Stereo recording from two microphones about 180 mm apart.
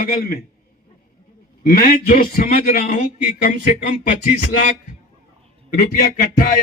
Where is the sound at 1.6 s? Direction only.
55° left (ahead or behind).